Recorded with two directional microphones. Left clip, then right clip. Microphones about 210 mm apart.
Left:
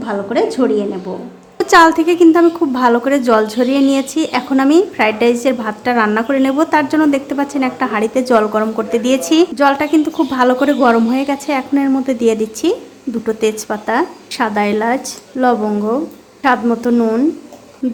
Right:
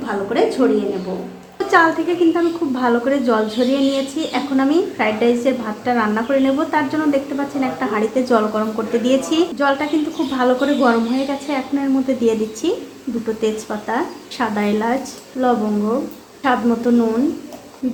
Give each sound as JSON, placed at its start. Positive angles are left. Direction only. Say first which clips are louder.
{"t": 0.0, "sound": "a woman's voice", "louder": "left 2 dB", "side_deg": 40}